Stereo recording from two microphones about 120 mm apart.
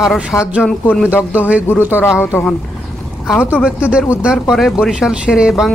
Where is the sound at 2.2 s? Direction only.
20° left (ahead or behind).